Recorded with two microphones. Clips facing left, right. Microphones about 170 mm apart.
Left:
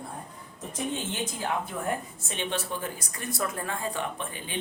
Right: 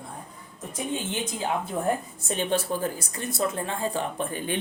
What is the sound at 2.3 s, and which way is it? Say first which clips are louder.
Speech: right 6 dB; 40° right (ahead or behind).